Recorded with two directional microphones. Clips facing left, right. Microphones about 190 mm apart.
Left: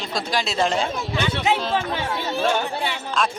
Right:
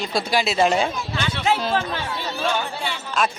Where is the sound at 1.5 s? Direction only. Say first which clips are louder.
Right 1 dB; 20° left (ahead or behind).